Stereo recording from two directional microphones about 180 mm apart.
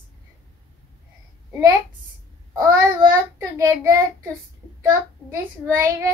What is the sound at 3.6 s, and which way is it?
A child's voice, 15° right (ahead or behind).